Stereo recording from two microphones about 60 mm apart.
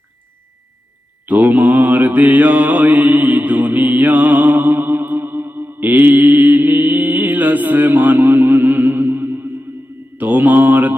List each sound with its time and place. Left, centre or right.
1.2 s mantra: right